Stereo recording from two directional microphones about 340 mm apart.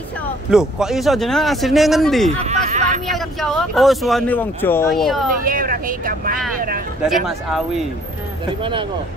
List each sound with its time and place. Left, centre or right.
0.5 s speech: centre
2.3 s a sound: centre
3.1 s speech: centre
5.4 s speech: right
7.2 s speech: centre